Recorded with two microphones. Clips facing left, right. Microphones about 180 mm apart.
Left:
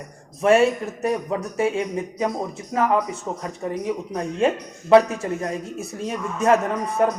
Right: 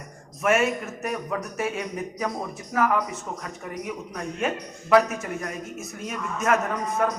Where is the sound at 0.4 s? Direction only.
30° left (ahead or behind).